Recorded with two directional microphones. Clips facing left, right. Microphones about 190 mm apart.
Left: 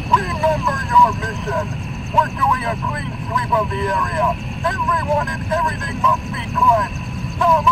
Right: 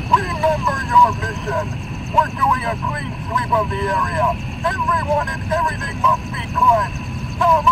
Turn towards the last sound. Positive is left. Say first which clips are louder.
# even
turn(degrees=0)  # may be behind; listen again after turning